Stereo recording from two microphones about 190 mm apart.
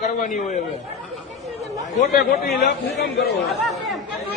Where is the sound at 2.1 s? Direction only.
60° left (ahead or behind).